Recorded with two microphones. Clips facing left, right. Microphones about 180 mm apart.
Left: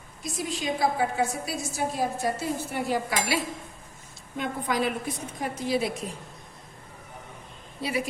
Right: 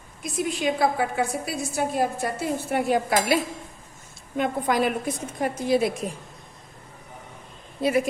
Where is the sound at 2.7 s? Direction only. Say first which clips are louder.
Right 9 dB; 55° right (ahead or behind).